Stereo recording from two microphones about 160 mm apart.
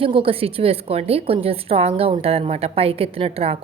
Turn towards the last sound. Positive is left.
turn(degrees=-35)  # may be behind; listen again after turning